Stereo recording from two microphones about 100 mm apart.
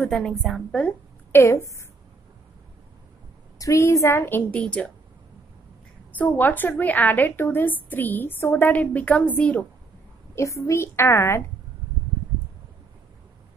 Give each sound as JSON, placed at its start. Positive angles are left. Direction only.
{"t": 0.1, "sound": "a woman's voice", "side_deg": 0}
{"t": 1.3, "sound": "a woman's voice", "side_deg": 25}
{"t": 3.5, "sound": "a woman's voice", "side_deg": 30}
{"t": 6.1, "sound": "a woman's voice", "side_deg": 20}
{"t": 10.3, "sound": "a woman's voice", "side_deg": 30}